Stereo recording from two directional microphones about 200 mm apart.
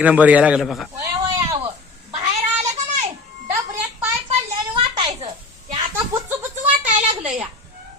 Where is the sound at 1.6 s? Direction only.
30° right (ahead or behind).